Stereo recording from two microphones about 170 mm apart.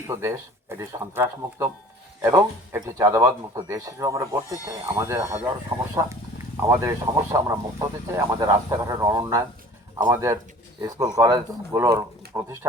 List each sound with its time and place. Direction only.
0.1 s speech: 15° right (ahead or behind)
6.6 s speech: 15° right (ahead or behind)